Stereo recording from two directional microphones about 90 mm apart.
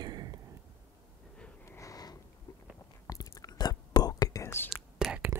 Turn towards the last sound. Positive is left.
turn(degrees=-5)  # may be behind; listen again after turning